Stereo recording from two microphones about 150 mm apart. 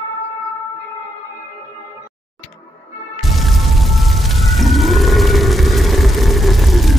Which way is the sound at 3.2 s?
Centre (ahead or behind).